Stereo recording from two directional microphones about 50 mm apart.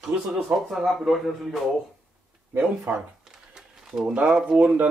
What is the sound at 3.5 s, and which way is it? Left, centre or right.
Crumpling, centre.